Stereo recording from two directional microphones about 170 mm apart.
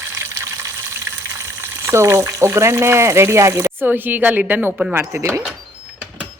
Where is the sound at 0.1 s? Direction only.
15° right (ahead or behind).